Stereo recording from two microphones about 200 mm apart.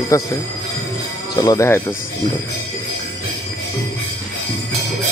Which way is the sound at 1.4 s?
15° left (ahead or behind).